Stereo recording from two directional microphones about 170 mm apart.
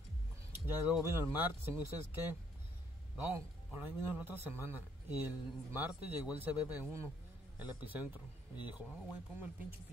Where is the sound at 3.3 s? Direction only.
10° right (ahead or behind).